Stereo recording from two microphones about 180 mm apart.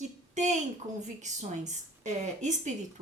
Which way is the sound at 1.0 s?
40° right (ahead or behind).